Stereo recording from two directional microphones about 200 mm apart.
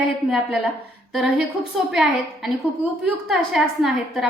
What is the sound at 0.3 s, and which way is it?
A woman's voice, 5° right (ahead or behind).